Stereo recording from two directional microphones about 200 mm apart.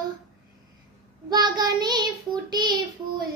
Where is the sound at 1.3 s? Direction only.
20° right (ahead or behind).